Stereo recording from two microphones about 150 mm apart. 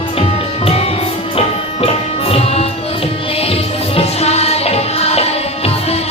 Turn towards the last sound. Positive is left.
turn(degrees=45)  # may be behind; listen again after turning